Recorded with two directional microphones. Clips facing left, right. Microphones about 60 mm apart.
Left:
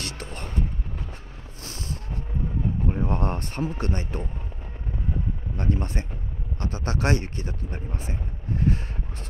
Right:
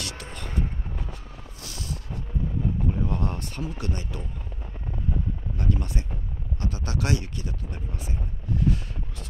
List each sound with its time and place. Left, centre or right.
0.0 s music: left
1.6 s music: left
2.9 s a sound: left
5.6 s speech: left